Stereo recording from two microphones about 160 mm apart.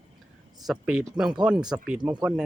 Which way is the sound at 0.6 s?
5° right (ahead or behind).